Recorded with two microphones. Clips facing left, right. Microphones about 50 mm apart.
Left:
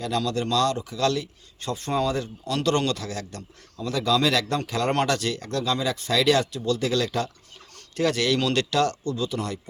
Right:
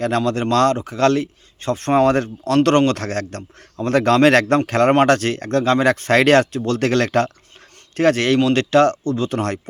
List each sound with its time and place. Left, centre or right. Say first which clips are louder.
0.2 s speech: right 6 dB; right